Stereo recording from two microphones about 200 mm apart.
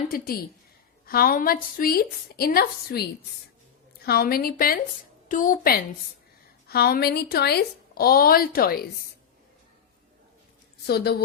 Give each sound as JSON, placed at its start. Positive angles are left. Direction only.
{"t": 1.0, "sound": "a woman's voice", "side_deg": 45}
{"t": 10.8, "sound": "a woman's voice", "side_deg": 50}